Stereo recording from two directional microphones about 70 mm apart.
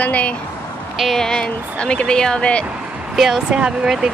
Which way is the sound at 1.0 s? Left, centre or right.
Centre.